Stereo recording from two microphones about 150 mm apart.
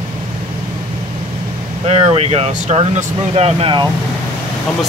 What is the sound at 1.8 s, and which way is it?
Speech, 40° right (ahead or behind).